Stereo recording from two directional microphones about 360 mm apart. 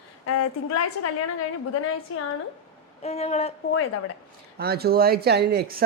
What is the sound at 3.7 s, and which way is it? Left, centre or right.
Speech, left.